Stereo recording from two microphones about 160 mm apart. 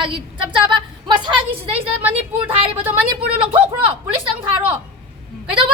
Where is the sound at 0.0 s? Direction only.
30° right (ahead or behind).